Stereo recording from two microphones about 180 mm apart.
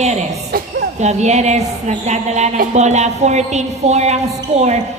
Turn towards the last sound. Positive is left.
turn(degrees=-40)  # may be behind; listen again after turning